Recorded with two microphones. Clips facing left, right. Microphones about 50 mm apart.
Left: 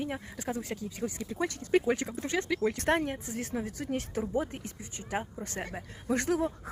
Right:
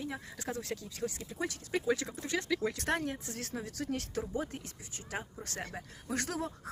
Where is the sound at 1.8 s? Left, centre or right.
Left.